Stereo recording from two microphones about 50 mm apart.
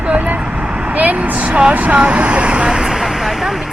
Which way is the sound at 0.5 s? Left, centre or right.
Centre.